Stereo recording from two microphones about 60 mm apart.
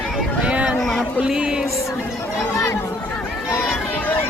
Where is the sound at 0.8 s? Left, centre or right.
Centre.